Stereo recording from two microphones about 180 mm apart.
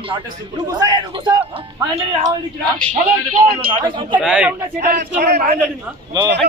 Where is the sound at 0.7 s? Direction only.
20° right (ahead or behind).